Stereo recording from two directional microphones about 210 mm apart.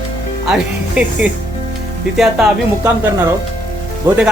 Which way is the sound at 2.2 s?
Centre (ahead or behind).